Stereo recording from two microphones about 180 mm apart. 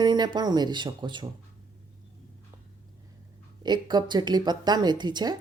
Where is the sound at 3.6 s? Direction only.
25° right (ahead or behind).